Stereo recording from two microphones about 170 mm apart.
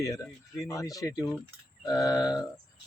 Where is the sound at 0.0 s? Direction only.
20° left (ahead or behind).